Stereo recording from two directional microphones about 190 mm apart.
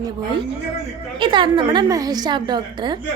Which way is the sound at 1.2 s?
25° right (ahead or behind).